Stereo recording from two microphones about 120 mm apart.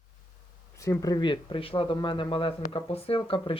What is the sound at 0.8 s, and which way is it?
Speech, 30° left (ahead or behind).